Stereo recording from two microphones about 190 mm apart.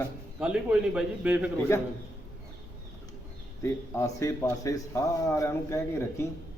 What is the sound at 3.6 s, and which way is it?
A man's voice, 15° left (ahead or behind).